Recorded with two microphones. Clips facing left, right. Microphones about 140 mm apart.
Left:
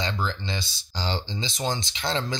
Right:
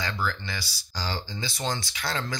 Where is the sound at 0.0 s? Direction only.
20° left (ahead or behind).